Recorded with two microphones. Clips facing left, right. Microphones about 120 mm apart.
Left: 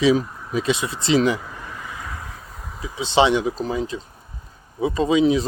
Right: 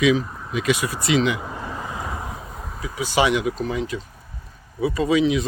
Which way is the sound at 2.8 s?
25° left (ahead or behind).